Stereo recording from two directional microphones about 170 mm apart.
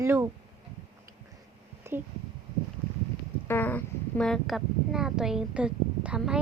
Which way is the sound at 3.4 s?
10° left (ahead or behind).